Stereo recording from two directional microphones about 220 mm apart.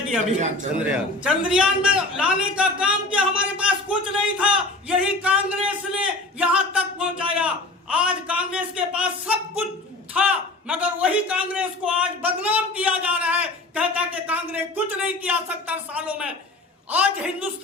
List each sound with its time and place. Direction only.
0.3 s a man's voice: 35° right (ahead or behind)
1.2 s a man's voice: 5° right (ahead or behind)